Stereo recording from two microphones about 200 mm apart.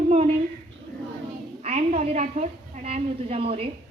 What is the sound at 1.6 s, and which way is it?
A woman's voice, 30° right (ahead or behind).